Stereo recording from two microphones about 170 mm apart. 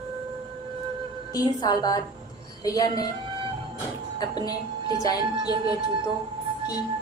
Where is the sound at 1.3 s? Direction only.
25° left (ahead or behind).